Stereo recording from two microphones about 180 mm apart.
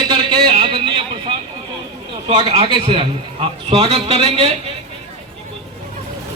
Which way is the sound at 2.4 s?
30° right (ahead or behind).